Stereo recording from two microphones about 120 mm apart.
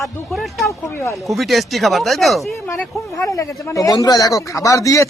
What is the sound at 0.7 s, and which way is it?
Speech, 25° left (ahead or behind).